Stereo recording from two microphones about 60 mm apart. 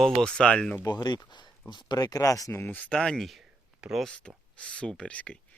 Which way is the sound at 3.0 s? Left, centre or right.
Centre.